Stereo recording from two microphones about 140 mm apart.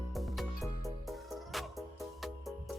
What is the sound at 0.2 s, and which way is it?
Music, centre (ahead or behind).